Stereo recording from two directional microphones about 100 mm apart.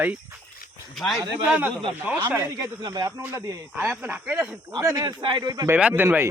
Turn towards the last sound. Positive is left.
turn(degrees=-25)  # may be behind; listen again after turning